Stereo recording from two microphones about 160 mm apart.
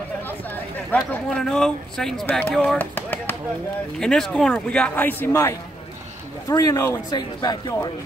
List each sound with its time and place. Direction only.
0.9 s a man's voice: 5° left (ahead or behind); by 7.9 s 25° left (ahead or behind)